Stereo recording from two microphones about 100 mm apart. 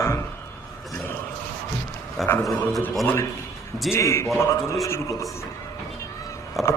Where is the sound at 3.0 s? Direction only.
25° left (ahead or behind).